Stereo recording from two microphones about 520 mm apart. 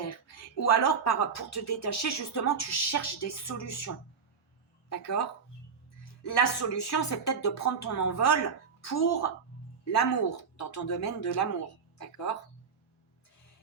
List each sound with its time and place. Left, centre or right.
0.3 s speech: left
4.9 s a woman's voice: left
6.2 s a woman's voice: left